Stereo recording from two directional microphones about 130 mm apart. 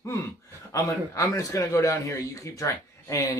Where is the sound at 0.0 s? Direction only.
25° left (ahead or behind).